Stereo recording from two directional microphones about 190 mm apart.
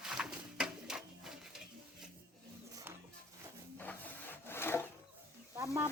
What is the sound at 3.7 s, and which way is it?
Wood, 10° left (ahead or behind).